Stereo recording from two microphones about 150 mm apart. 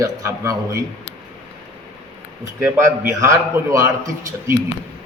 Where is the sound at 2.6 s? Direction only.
15° right (ahead or behind).